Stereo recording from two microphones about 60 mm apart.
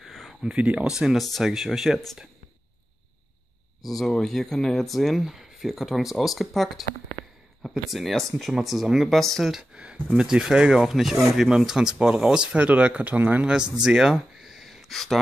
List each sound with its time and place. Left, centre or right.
0.0 s a sound: centre
0.7 s speech: centre
3.9 s speech: centre; by 13.5 s right
13.5 s speech: centre